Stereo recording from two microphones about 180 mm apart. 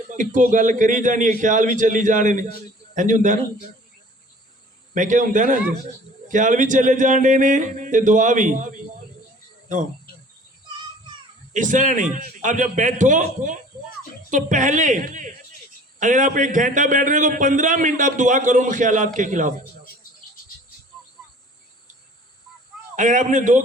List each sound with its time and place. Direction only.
0.1 s a man's voice: 45° right (ahead or behind)
4.9 s a man's voice: 45° right (ahead or behind)
11.5 s a man's voice: 45° right (ahead or behind)
23.0 s a man's voice: 45° right (ahead or behind)